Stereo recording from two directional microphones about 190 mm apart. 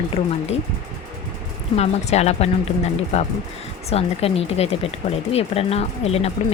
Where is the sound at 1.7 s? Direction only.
35° left (ahead or behind).